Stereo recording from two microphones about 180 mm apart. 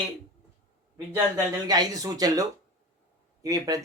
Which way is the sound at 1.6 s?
20° right (ahead or behind).